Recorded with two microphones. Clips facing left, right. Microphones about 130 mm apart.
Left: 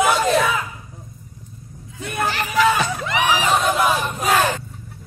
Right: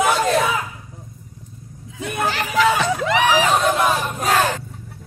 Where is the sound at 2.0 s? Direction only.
90° right.